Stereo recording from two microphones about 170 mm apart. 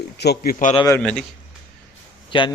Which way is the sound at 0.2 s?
75° left (ahead or behind).